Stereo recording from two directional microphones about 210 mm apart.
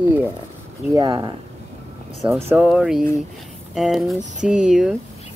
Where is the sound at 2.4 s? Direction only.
5° right (ahead or behind).